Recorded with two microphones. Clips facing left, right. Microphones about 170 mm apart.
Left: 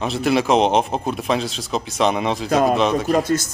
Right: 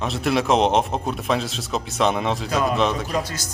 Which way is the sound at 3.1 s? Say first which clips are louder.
Left 8 dB; 50° left (ahead or behind).